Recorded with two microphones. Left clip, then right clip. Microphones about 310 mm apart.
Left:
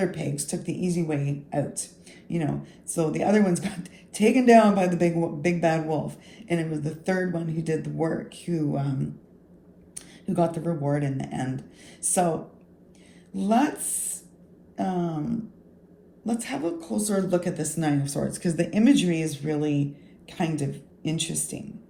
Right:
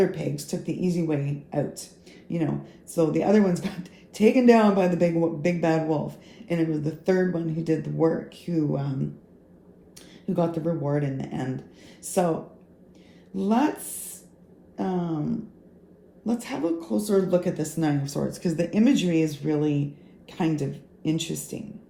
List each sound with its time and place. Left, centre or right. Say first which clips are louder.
0.0 s speech: right 4 dB; left
10.2 s speech: even; left
13.3 s a woman's voice: left 1 dB; left